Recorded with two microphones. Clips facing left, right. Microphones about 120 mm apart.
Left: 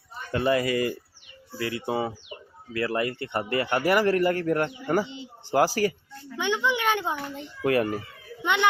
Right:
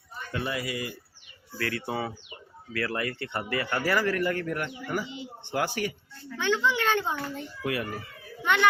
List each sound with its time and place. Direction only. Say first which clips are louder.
0.3 s speech: left 9 dB; 45° left (ahead or behind)
1.5 s a man's voice: left 3 dB; 20° left (ahead or behind); by 5.9 s 35° left (ahead or behind)
6.3 s a child's voice: even; 15° left (ahead or behind)
7.6 s speech: left 8 dB; 45° left (ahead or behind)
8.4 s a child's voice: even; 20° left (ahead or behind)